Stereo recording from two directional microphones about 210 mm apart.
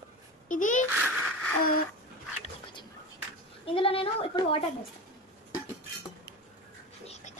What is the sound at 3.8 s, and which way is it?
Speech, 25° left (ahead or behind).